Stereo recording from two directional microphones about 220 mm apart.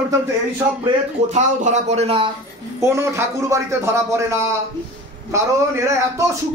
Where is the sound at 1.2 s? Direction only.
30° right (ahead or behind).